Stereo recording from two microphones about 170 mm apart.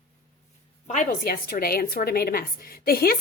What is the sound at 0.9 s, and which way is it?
A woman's voice, 50° left (ahead or behind).